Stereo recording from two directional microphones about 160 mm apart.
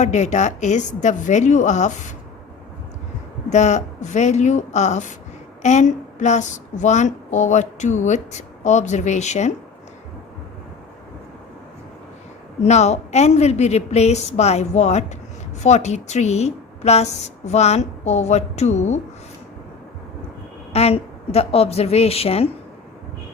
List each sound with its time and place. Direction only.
0.0 s speech: 50° left (ahead or behind)
3.5 s speech: 50° left (ahead or behind)
12.6 s speech: 45° left (ahead or behind)
20.7 s a woman's voice: 40° left (ahead or behind)